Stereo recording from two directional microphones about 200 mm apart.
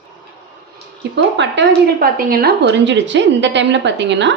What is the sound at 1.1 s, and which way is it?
Speech, 60° right (ahead or behind).